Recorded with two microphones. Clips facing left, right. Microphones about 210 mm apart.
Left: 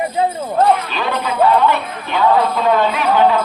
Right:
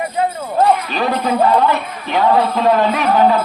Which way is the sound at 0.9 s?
40° right (ahead or behind).